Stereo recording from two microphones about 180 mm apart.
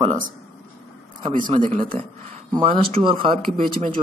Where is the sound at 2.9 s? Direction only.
30° right (ahead or behind).